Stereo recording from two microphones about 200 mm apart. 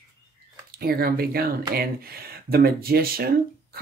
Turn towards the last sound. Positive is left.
turn(degrees=-50)  # may be behind; listen again after turning